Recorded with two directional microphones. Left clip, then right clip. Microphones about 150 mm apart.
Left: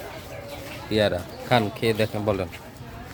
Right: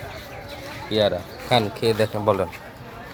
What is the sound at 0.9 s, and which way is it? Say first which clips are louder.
Speech: right 2 dB; 25° left (ahead or behind).